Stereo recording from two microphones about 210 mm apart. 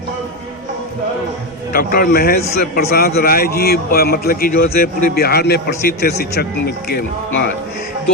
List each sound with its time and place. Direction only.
1.7 s a man's voice: 45° left (ahead or behind)